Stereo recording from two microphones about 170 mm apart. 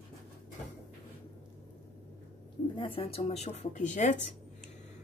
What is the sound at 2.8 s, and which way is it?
Speech, 35° left (ahead or behind).